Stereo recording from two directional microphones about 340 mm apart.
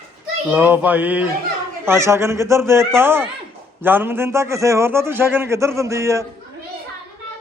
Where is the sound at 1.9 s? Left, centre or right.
Centre.